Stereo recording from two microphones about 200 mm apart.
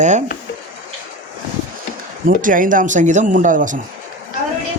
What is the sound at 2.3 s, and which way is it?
A man's voice, 40° right (ahead or behind).